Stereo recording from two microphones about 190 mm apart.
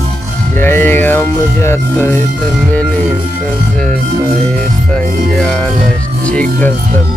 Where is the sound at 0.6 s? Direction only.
10° left (ahead or behind).